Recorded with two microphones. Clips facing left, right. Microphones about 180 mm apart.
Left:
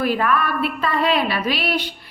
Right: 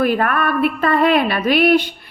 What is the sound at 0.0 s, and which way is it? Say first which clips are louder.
A woman's voice: right 3 dB; 55° right (ahead or behind).